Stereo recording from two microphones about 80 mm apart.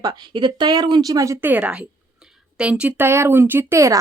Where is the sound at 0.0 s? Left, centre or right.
Right.